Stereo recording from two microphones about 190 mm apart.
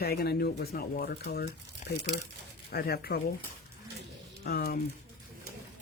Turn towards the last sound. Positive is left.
turn(degrees=55)  # may be behind; listen again after turning